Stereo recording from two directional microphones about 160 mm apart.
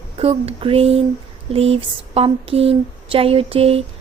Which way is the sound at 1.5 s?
35° right (ahead or behind).